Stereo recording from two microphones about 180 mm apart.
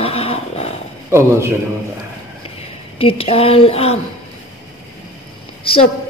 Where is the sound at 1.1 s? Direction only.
15° right (ahead or behind).